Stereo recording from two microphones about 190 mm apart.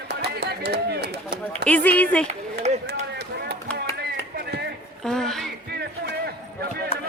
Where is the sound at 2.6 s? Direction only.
35° right (ahead or behind).